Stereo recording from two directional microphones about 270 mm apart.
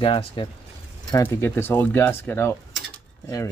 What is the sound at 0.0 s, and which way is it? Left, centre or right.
Speech, centre.